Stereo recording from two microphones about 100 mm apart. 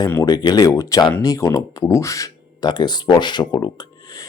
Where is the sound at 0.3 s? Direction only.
45° left (ahead or behind).